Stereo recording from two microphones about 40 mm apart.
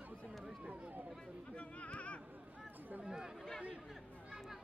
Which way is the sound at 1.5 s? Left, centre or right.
Left.